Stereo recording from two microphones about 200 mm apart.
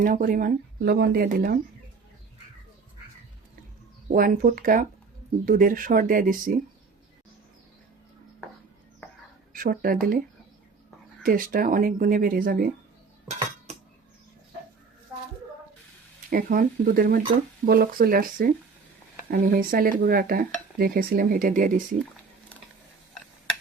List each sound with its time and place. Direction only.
0.0 s speech: 45° right (ahead or behind)
4.1 s speech: 45° right (ahead or behind)
9.5 s speech: 45° right (ahead or behind)
11.2 s speech: 45° right (ahead or behind)
16.3 s speech: 45° right (ahead or behind)